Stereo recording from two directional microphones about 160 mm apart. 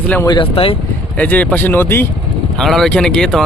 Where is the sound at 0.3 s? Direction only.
35° left (ahead or behind).